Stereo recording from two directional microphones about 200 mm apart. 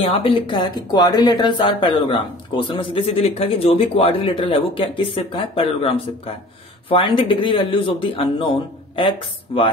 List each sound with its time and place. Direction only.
0.0 s speech: 25° left (ahead or behind)